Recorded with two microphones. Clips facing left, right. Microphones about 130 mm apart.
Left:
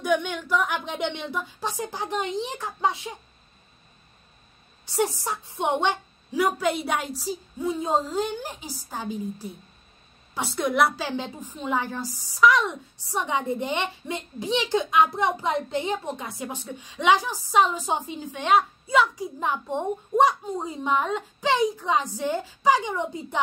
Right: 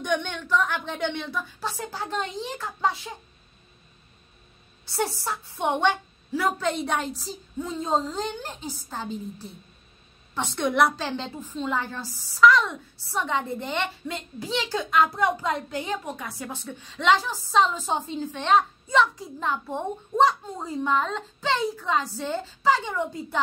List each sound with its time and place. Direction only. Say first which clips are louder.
0.0 s a woman's voice: left 3 dB; 5° left (ahead or behind)
4.8 s a woman's voice: left 2 dB; 15° left (ahead or behind)